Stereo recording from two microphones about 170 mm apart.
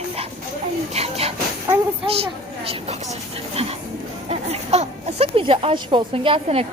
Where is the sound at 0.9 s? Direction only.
35° right (ahead or behind).